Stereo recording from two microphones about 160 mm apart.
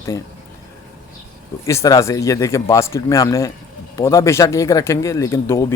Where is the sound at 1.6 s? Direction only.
20° left (ahead or behind).